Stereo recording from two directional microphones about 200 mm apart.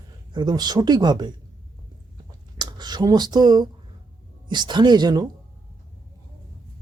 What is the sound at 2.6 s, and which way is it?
A man's voice, 20° right (ahead or behind).